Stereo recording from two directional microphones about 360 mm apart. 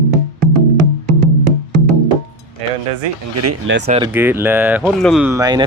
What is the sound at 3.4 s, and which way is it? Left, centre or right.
Speech, right.